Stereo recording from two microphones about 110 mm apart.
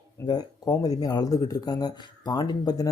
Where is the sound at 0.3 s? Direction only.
35° left (ahead or behind).